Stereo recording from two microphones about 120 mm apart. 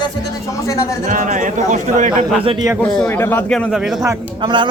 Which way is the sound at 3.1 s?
20° left (ahead or behind).